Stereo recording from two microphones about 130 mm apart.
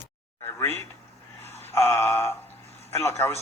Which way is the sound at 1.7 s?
20° left (ahead or behind).